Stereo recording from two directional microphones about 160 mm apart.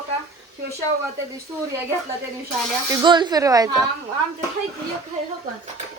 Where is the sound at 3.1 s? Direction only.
30° right (ahead or behind).